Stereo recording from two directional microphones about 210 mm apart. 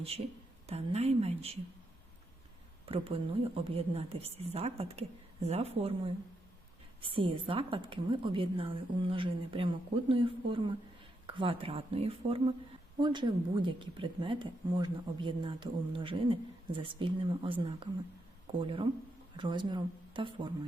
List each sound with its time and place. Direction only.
0.7 s speech: 30° right (ahead or behind)
2.8 s speech: 25° right (ahead or behind)
7.0 s speech: 25° right (ahead or behind)